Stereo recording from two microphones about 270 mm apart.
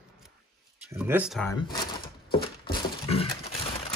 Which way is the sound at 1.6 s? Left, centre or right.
Centre.